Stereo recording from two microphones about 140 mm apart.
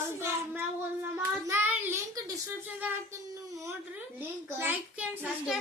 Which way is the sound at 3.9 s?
15° right (ahead or behind).